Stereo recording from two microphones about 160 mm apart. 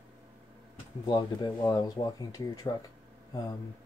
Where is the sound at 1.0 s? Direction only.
25° left (ahead or behind).